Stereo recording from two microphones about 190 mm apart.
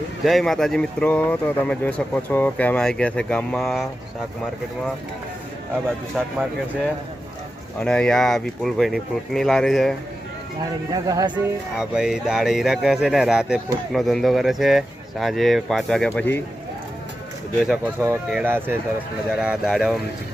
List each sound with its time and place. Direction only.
0.3 s speech: centre (ahead or behind)
6.2 s speech: 5° right (ahead or behind)
7.8 s speech: 5° left (ahead or behind)
10.9 s speech: 20° right (ahead or behind)
11.3 s speech: 5° right (ahead or behind)
17.7 s speech: 10° right (ahead or behind)